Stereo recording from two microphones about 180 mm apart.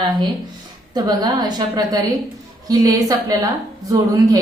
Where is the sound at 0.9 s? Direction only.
20° right (ahead or behind).